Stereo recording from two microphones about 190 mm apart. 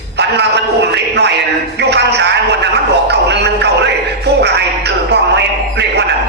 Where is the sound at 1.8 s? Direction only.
65° right (ahead or behind).